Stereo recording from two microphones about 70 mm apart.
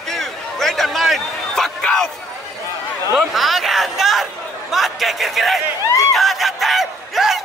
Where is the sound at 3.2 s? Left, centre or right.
Centre.